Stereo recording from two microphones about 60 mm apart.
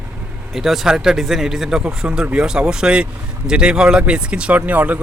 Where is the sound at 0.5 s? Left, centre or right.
Centre.